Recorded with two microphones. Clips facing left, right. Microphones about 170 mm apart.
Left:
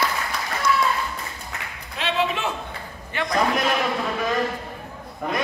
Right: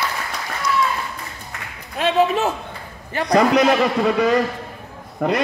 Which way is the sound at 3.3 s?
75° right (ahead or behind).